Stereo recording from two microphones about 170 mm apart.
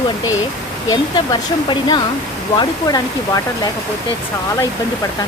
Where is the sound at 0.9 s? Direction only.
25° left (ahead or behind).